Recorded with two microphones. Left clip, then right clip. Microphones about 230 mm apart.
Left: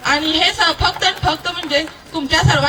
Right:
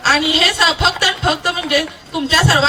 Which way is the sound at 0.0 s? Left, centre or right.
Right.